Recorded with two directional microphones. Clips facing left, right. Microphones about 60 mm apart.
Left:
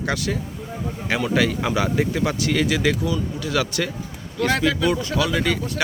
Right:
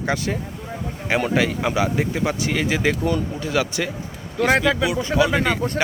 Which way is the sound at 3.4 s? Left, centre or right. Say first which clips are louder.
Left 1 dB; centre.